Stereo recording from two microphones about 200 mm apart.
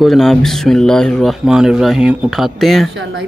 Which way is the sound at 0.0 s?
Centre (ahead or behind).